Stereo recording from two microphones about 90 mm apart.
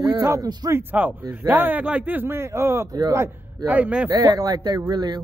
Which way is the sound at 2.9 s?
45° right (ahead or behind).